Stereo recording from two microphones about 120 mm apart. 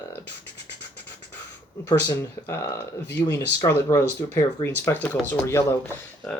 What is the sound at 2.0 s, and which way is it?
Speech, 20° left (ahead or behind).